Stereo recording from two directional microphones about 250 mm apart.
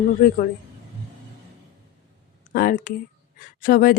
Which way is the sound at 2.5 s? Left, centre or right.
Left.